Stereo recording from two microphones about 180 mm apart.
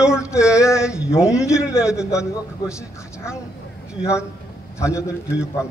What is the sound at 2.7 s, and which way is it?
Speech, 15° left (ahead or behind).